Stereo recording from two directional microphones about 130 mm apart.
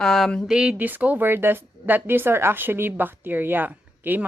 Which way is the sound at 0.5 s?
10° right (ahead or behind).